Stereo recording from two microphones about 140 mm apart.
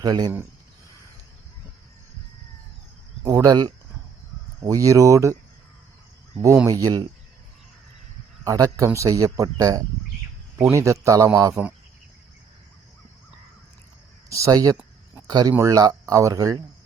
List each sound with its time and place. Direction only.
0.0 s speech: 30° right (ahead or behind)
3.2 s speech: 30° right (ahead or behind)
6.7 s speech: 25° right (ahead or behind)
8.4 s speech: 25° right (ahead or behind)
14.3 s speech: 25° right (ahead or behind)